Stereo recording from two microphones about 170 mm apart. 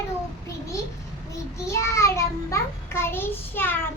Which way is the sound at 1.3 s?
15° left (ahead or behind).